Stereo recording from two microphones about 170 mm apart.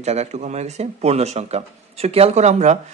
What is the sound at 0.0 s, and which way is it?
Speech, 40° right (ahead or behind).